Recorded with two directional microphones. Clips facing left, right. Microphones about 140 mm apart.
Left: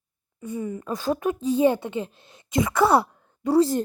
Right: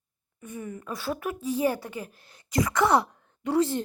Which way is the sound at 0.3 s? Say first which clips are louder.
Left 7 dB; 30° left (ahead or behind).